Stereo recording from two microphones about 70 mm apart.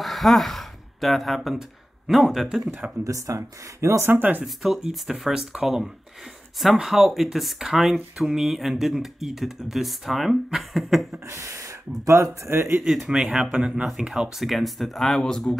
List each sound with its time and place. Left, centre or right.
0.0 s a sound: centre
2.0 s speech: centre
3.0 s speech: right
4.1 s speech: right
4.6 s speech: centre
11.2 s gasp: right
12.1 s speech: right
13.1 s speech: centre